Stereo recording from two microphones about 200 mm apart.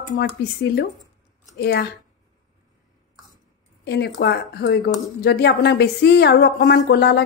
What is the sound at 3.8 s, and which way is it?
A woman's voice, 55° left (ahead or behind).